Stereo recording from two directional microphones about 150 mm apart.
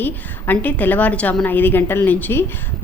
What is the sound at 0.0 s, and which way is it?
A woman's voice, 10° left (ahead or behind).